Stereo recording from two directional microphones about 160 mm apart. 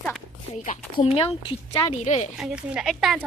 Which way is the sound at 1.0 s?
35° left (ahead or behind).